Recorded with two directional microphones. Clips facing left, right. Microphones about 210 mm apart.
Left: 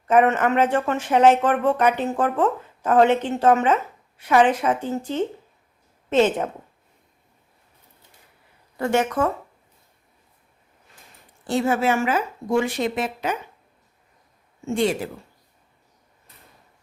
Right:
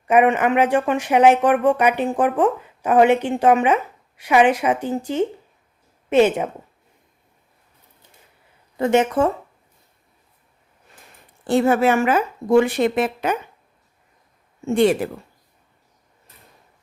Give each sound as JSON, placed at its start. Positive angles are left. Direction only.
{"t": 0.1, "sound": "speech", "side_deg": -10}
{"t": 8.8, "sound": "speech", "side_deg": -20}
{"t": 11.4, "sound": "speech", "side_deg": -55}
{"t": 14.7, "sound": "speech", "side_deg": -60}